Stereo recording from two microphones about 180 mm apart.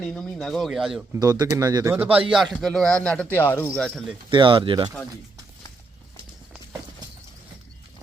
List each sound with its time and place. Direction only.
0.1 s speech: centre (ahead or behind)
1.1 s speech: 20° right (ahead or behind); by 4.0 s 5° left (ahead or behind)
4.3 s speech: 25° right (ahead or behind)